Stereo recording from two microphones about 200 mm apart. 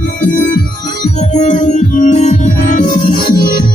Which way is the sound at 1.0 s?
35° left (ahead or behind).